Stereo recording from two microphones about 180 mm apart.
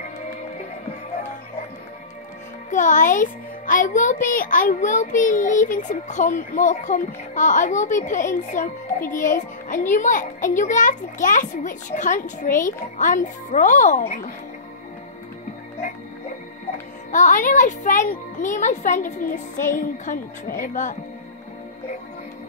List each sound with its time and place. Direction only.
2.7 s a child's voice: 45° left (ahead or behind)
17.1 s a child's voice: 45° left (ahead or behind)